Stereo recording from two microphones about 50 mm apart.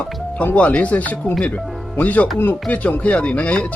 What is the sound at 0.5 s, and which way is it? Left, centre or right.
Speech, left.